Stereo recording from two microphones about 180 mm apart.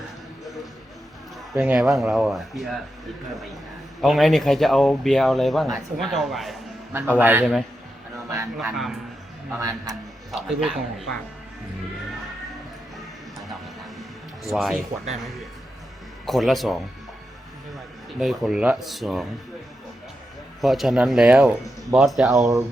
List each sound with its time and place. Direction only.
1.5 s speech: 5° right (ahead or behind)
4.0 s speech: centre (ahead or behind)
6.9 s a man's voice: 10° right (ahead or behind)
8.7 s speech: centre (ahead or behind)
9.6 s speech: 20° right (ahead or behind)
10.3 s speech: centre (ahead or behind)
14.5 s speech: centre (ahead or behind)
18.2 s speech: centre (ahead or behind)
20.6 s speech: centre (ahead or behind)